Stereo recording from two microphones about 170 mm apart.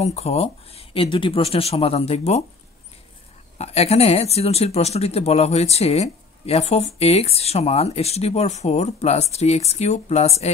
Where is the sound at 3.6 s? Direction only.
40° left (ahead or behind).